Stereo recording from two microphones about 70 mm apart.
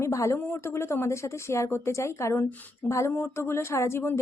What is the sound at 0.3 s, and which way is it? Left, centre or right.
A woman's voice, left.